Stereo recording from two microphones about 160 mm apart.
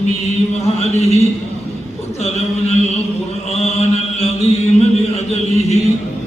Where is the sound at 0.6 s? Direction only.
40° left (ahead or behind).